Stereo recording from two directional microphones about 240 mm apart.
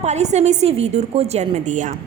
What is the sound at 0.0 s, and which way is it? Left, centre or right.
A woman's voice, right.